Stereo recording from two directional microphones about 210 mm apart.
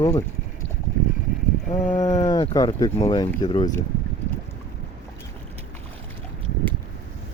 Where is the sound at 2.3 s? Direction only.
20° left (ahead or behind).